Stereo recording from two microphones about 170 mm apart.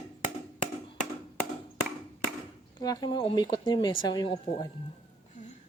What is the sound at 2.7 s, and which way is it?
Speech, 25° left (ahead or behind).